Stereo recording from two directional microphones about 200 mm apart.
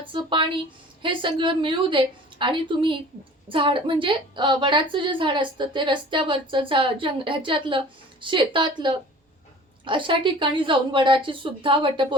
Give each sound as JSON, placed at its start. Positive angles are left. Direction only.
{"t": 0.0, "sound": "a woman's voice", "side_deg": -25}